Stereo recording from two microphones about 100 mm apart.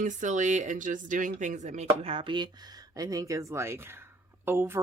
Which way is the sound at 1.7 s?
80° right.